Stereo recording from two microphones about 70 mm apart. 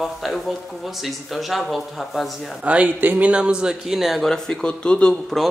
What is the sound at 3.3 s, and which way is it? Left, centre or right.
Speech, centre.